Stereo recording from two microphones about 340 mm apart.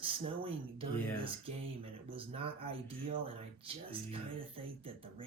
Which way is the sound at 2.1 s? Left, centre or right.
Centre.